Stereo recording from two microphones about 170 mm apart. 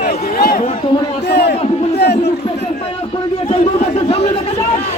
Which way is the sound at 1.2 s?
75° left (ahead or behind).